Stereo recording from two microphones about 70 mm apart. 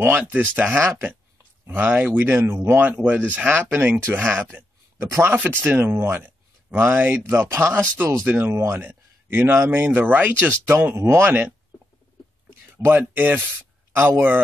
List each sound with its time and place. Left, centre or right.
0.0 s speech: right
5.0 s speech: right
5.6 s speech: right
8.3 s speech: right
12.7 s speech: right